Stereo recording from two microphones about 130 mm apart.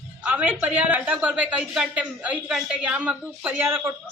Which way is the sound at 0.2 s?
10° right (ahead or behind).